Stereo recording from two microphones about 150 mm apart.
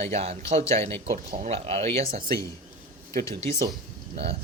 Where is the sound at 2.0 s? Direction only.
70° right (ahead or behind).